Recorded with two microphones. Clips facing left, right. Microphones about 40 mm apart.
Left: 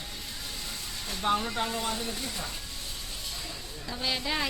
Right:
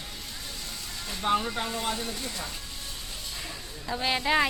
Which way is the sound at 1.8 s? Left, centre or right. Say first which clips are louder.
Right 1 dB; right.